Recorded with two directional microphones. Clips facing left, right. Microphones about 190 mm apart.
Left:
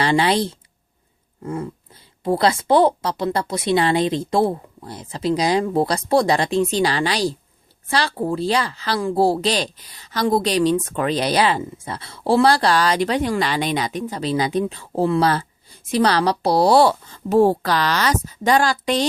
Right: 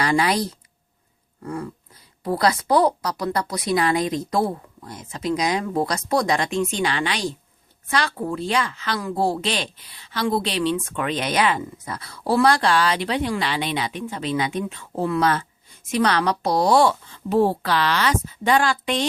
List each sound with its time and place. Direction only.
0.0 s a woman's voice: 30° left (ahead or behind)
1.4 s dog: 25° left (ahead or behind)
2.2 s a woman's voice: 25° left (ahead or behind)